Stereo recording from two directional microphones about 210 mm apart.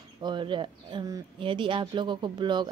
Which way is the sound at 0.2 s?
20° right (ahead or behind).